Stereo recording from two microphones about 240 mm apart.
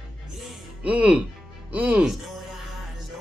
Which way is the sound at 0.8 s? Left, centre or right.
Centre.